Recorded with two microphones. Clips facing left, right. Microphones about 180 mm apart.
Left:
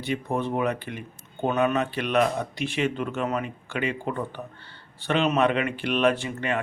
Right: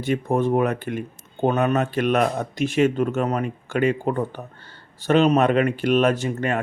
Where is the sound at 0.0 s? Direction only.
45° right (ahead or behind).